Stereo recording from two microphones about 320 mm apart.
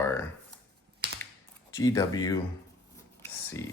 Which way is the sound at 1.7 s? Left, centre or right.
Centre.